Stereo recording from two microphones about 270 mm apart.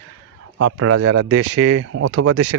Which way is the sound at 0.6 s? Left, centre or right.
Right.